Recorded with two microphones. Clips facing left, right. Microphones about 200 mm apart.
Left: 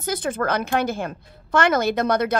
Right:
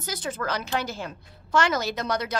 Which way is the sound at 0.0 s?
55° left (ahead or behind).